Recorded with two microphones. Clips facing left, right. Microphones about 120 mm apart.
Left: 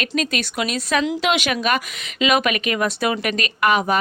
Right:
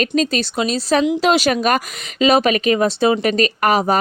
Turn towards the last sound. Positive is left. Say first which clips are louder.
# right 2 dB
turn(degrees=-35)  # may be behind; listen again after turning